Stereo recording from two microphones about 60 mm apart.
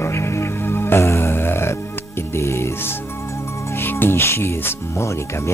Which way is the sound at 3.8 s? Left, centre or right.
Left.